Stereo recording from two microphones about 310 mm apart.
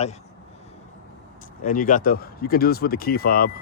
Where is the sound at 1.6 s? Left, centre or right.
Left.